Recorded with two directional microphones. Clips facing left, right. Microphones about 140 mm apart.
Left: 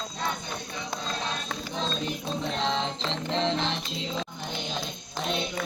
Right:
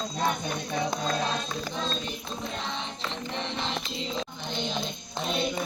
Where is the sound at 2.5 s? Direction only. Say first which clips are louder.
Left 7 dB; 90° left.